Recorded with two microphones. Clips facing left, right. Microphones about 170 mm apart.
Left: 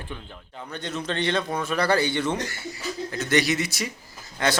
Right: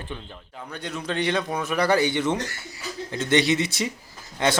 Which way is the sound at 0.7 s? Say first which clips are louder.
Even; 10° right (ahead or behind).